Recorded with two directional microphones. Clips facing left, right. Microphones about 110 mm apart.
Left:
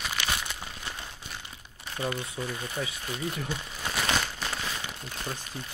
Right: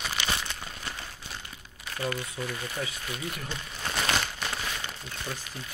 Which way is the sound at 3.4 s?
10° left (ahead or behind).